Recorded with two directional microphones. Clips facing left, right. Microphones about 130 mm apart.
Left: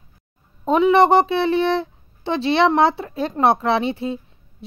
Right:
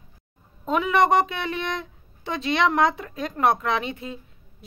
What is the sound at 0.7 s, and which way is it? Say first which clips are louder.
Speech: left 6 dB; 30° left (ahead or behind).